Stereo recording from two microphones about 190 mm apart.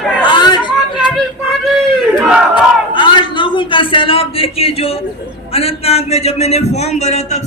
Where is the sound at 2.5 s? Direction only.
25° left (ahead or behind).